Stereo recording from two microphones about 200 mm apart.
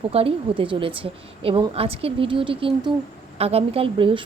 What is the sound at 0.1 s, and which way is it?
A woman's voice, 30° right (ahead or behind).